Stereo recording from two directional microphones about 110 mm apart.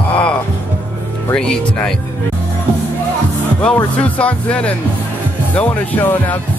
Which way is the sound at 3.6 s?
10° left (ahead or behind).